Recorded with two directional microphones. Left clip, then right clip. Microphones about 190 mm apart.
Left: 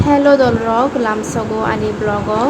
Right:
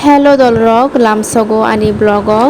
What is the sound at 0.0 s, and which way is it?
A woman's voice, 40° right (ahead or behind).